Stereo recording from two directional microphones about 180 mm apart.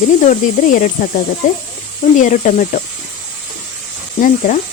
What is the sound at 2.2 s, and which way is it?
Speech, 45° left (ahead or behind).